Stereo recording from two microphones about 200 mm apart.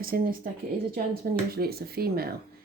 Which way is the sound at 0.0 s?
45° right (ahead or behind).